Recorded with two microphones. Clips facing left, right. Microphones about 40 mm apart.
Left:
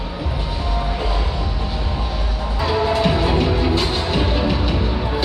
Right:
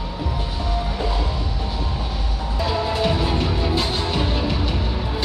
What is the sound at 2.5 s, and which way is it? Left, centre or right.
Music, centre.